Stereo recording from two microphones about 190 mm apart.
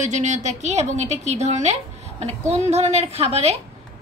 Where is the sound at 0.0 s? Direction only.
40° right (ahead or behind).